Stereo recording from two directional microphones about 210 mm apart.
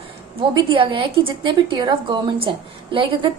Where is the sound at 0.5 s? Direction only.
20° right (ahead or behind).